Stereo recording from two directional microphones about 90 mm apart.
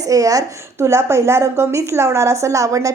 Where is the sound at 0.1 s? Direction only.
40° right (ahead or behind).